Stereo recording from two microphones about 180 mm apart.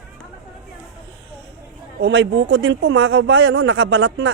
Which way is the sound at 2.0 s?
80° right.